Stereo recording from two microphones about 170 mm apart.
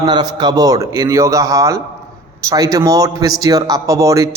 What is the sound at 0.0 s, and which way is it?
A man's voice, 25° right (ahead or behind).